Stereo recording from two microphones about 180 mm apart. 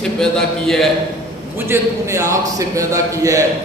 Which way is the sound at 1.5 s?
15° right (ahead or behind).